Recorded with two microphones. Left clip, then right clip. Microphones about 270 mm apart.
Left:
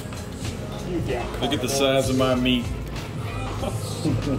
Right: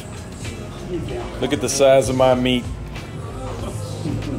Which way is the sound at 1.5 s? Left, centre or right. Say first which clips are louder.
Right 8 dB; centre.